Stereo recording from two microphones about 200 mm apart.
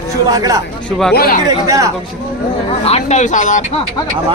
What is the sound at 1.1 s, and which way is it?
Speech, 50° left (ahead or behind).